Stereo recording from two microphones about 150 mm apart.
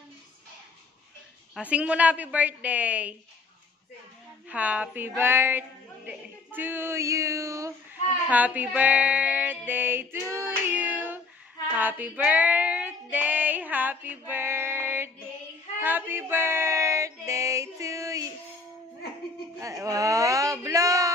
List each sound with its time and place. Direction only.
1.5 s female singing: 10° right (ahead or behind)
4.5 s female singing: 10° right (ahead or behind)
15.8 s a sound: 15° right (ahead or behind)
19.6 s speech: 20° right (ahead or behind)